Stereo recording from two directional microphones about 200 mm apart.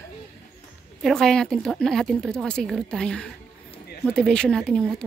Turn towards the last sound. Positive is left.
turn(degrees=5)  # may be behind; listen again after turning